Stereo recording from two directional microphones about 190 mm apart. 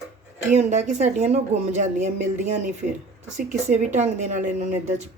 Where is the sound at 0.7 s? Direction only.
40° right (ahead or behind).